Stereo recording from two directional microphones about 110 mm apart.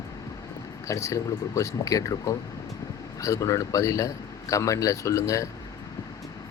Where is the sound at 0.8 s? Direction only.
30° left (ahead or behind).